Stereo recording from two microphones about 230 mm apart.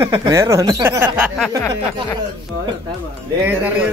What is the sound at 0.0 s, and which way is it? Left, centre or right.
Speech, centre.